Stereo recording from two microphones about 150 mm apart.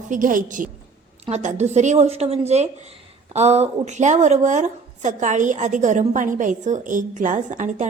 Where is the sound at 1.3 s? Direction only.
50° right (ahead or behind).